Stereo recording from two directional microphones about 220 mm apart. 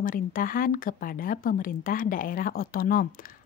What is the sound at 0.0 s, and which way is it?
A woman's voice, 40° left (ahead or behind).